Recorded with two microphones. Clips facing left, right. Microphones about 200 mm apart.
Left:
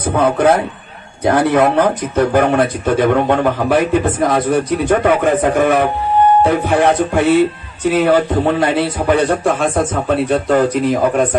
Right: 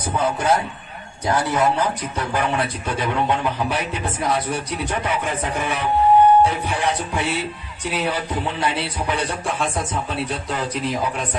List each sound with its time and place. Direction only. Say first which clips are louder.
0.1 s a man's voice: left 8 dB; 55° left (ahead or behind)